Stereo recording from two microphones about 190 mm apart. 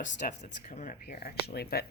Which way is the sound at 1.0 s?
55° left (ahead or behind).